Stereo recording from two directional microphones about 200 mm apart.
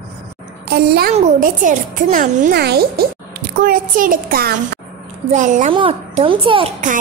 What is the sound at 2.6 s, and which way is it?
A child's voice, 50° right (ahead or behind).